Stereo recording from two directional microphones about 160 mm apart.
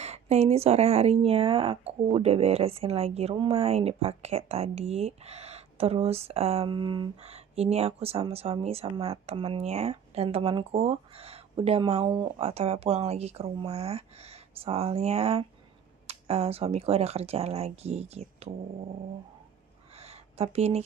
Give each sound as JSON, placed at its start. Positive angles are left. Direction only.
{"t": 0.0, "sound": "speech", "side_deg": -45}
{"t": 7.2, "sound": "speech", "side_deg": -40}
{"t": 20.0, "sound": "a sound", "side_deg": -40}